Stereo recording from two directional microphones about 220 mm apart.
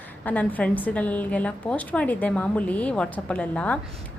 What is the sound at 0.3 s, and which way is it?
A woman's voice, 5° left (ahead or behind).